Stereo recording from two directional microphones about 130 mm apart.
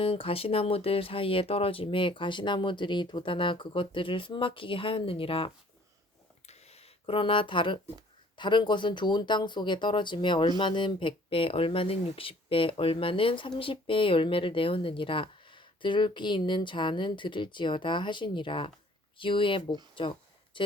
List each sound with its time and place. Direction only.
0.0 s speech: 45° left (ahead or behind)
7.0 s speech: 45° left (ahead or behind)
20.0 s a sound: 40° left (ahead or behind)